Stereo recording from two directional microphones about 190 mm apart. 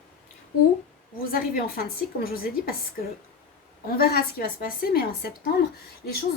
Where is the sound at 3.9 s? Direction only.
55° left (ahead or behind).